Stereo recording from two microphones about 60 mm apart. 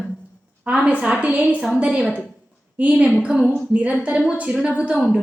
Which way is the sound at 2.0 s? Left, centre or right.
Left.